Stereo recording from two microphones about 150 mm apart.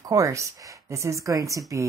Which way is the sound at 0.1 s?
20° right (ahead or behind).